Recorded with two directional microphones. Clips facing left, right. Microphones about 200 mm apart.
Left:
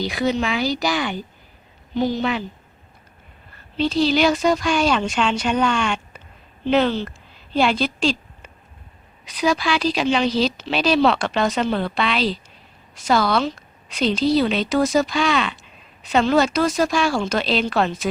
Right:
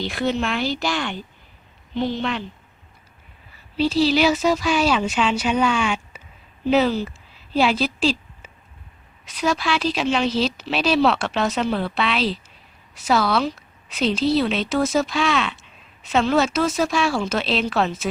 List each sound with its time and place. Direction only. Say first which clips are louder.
0.0 s a woman's voice: left 2 dB; centre (ahead or behind)
3.5 s a woman's voice: right 1 dB; 5° right (ahead or behind)